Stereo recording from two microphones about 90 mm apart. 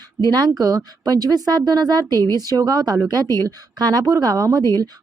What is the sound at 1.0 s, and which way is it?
Speech, 45° right (ahead or behind).